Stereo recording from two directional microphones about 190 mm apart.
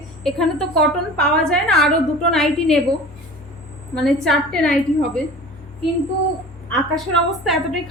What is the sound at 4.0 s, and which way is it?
Speech, centre (ahead or behind).